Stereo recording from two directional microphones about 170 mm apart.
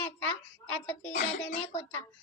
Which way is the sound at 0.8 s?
10° left (ahead or behind).